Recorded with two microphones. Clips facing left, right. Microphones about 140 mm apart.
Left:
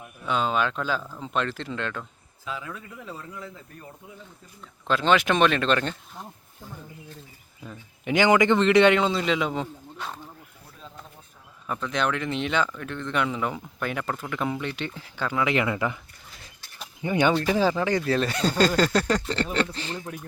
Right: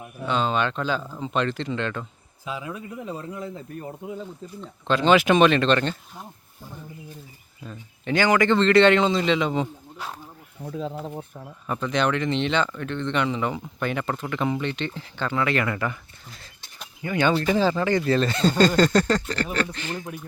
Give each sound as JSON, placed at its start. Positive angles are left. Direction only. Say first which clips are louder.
{"t": 0.3, "sound": "speech", "louder": "right 1 dB", "side_deg": 5}
{"t": 2.4, "sound": "speech", "louder": "right 3 dB", "side_deg": -15}
{"t": 4.9, "sound": "speech", "louder": "right 4 dB", "side_deg": 0}
{"t": 7.6, "sound": "speech", "louder": "right 1 dB", "side_deg": 10}
{"t": 10.6, "sound": "speech", "louder": "right 18 dB", "side_deg": -80}
{"t": 11.6, "sound": "speech", "louder": "right 3 dB", "side_deg": 0}
{"t": 17.0, "sound": "speech", "louder": "even", "side_deg": 15}
{"t": 17.3, "sound": "speech", "louder": "right 1 dB", "side_deg": 0}
{"t": 19.7, "sound": "speech", "louder": "right 2 dB", "side_deg": 30}